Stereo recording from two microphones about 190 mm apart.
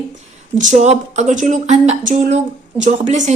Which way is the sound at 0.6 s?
40° right (ahead or behind).